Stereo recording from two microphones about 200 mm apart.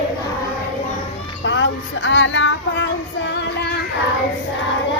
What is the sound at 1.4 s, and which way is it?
Music, 70° left (ahead or behind).